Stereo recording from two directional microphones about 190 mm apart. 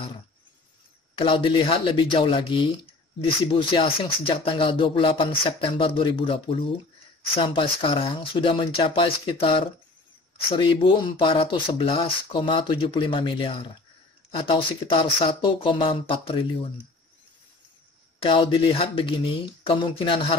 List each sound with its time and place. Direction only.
1.1 s speech: 25° left (ahead or behind)
18.2 s speech: 25° left (ahead or behind)